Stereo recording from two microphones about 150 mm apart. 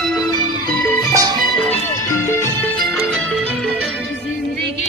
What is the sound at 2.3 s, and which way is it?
Music, 15° left (ahead or behind).